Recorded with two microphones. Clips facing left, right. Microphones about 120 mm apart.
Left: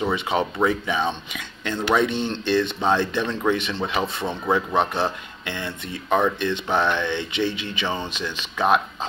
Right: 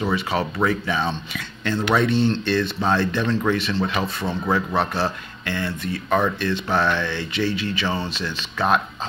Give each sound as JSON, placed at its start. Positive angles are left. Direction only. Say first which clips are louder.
{"t": 0.0, "sound": "speech", "louder": "even", "side_deg": 20}